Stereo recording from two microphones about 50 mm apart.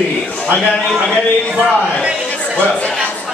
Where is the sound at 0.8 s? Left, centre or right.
Centre.